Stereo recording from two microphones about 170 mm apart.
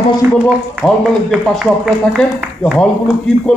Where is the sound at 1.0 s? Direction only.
Centre (ahead or behind).